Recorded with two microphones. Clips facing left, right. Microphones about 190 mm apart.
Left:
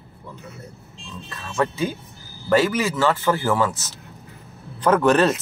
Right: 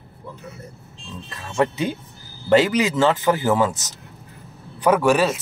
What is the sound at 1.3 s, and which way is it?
Music, 25° right (ahead or behind).